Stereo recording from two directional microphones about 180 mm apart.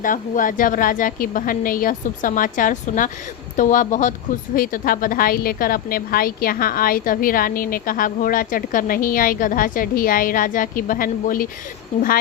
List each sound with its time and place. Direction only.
0.0 s a woman's voice: 50° left (ahead or behind)